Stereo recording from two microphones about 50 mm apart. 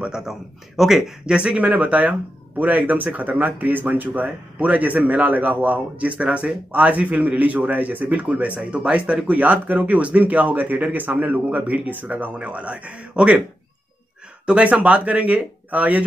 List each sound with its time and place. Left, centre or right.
0.1 s speech: centre
1.2 s a man's voice: right
14.4 s speech: right